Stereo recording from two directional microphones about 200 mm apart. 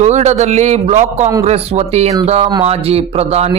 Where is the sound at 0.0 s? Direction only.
35° right (ahead or behind).